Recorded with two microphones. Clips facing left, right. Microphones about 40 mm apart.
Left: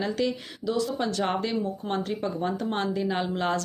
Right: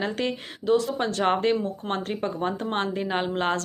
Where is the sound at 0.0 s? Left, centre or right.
Right.